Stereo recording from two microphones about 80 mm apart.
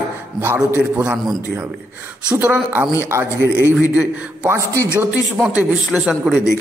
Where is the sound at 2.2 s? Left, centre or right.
Centre.